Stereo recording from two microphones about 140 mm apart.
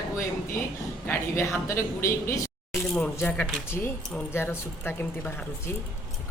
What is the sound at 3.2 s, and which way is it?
Speech, 5° left (ahead or behind).